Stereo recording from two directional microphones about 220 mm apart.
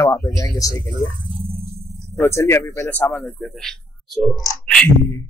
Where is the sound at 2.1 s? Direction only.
10° left (ahead or behind).